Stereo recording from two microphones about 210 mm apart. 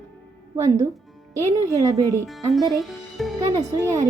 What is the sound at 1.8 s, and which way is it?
Speech, 15° right (ahead or behind).